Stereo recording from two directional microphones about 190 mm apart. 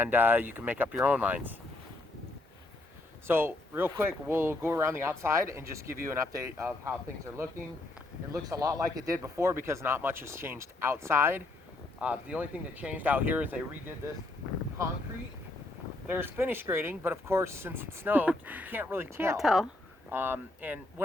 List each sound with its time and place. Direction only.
0.0 s speech: 10° right (ahead or behind)
3.2 s speech: 10° right (ahead or behind)
8.3 s speech: 20° right (ahead or behind)
16.0 s speech: 10° right (ahead or behind)
19.4 s speech: centre (ahead or behind)